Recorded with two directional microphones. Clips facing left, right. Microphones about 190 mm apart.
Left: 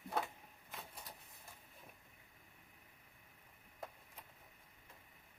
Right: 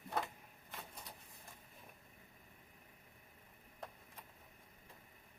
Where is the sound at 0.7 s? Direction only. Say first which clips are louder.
Even; 5° left (ahead or behind).